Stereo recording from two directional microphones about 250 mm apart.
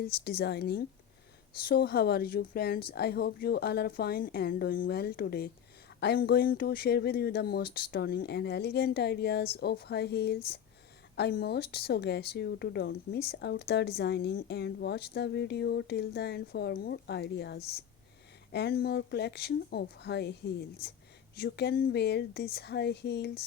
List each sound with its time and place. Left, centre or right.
0.0 s speech: left